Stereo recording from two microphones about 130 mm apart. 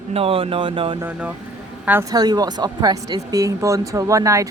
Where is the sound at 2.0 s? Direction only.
30° right (ahead or behind).